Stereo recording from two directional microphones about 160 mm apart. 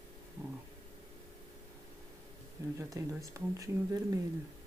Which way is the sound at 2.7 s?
20° right (ahead or behind).